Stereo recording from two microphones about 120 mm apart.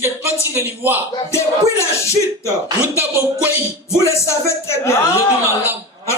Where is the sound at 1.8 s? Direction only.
25° left (ahead or behind).